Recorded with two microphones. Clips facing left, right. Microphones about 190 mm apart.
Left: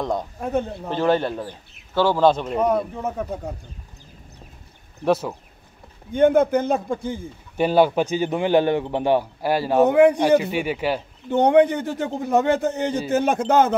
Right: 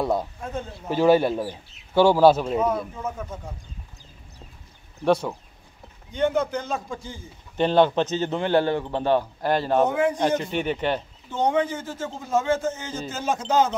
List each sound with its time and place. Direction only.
0.0 s speech: 5° right (ahead or behind)
0.4 s a man's voice: 65° left (ahead or behind)
0.8 s speech: 10° right (ahead or behind)
2.6 s a man's voice: 65° left (ahead or behind)
5.0 s speech: 5° left (ahead or behind)
6.1 s a man's voice: 55° left (ahead or behind)
7.5 s a man's voice: 10° left (ahead or behind)
9.8 s a man's voice: 65° left (ahead or behind)
10.2 s a man's voice: 10° left (ahead or behind)
11.2 s a man's voice: 65° left (ahead or behind)